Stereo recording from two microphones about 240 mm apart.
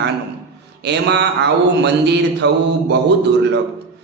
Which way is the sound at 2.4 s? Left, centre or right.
Right.